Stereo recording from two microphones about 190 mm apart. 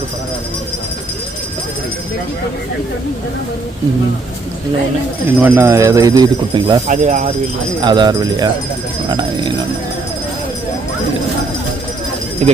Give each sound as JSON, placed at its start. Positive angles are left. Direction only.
{"t": 5.4, "sound": "speech", "side_deg": -15}
{"t": 6.8, "sound": "speech", "side_deg": -40}
{"t": 7.8, "sound": "speech", "side_deg": -25}